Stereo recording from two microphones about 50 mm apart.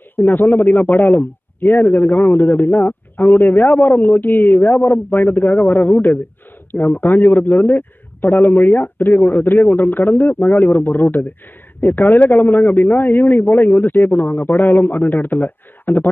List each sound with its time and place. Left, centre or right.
0.1 s a man's voice: left